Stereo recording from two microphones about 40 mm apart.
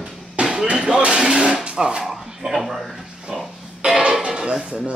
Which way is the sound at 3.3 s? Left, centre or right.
Centre.